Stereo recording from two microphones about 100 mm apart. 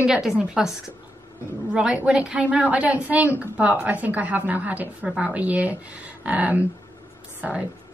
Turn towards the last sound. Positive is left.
turn(degrees=-10)  # may be behind; listen again after turning